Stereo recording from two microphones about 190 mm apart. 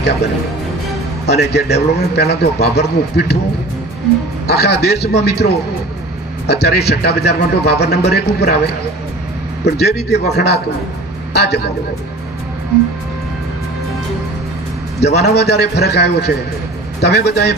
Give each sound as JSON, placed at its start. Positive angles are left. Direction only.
{"t": 1.2, "sound": "a man's voice", "side_deg": 60}
{"t": 4.5, "sound": "a man's voice", "side_deg": 60}
{"t": 15.0, "sound": "a man's voice", "side_deg": 60}